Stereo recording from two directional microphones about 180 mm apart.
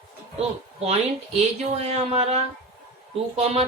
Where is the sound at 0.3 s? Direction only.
35° right (ahead or behind).